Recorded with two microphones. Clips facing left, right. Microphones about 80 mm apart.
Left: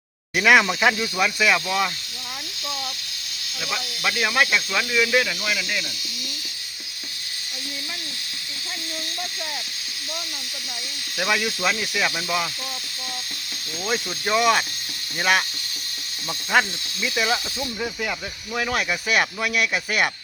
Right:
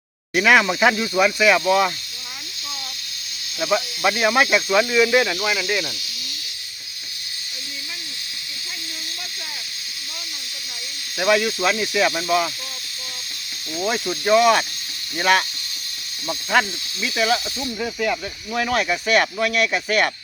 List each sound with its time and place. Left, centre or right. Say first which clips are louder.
0.3 s speech: right 1 dB; centre
3.6 s speech: right 8 dB; centre
11.2 s speech: right 5 dB; centre
13.8 s speech: right 4 dB; centre
16.5 s speech: right 1 dB; centre